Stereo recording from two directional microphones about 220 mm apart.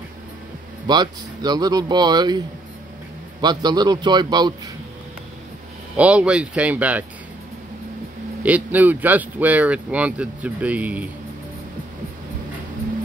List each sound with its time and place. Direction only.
0.8 s speech: 20° right (ahead or behind)
5.9 s speech: 5° right (ahead or behind)
8.4 s speech: 5° right (ahead or behind)